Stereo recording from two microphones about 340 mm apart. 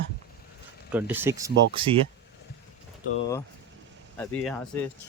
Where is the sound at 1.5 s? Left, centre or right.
Right.